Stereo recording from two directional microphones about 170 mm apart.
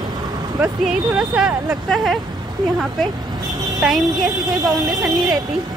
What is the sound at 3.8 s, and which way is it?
Speech, centre (ahead or behind).